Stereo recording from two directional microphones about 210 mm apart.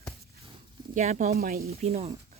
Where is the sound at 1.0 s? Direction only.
35° right (ahead or behind).